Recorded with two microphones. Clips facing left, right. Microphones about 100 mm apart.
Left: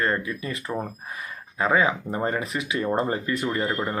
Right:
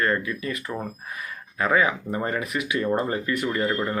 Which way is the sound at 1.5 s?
25° left (ahead or behind).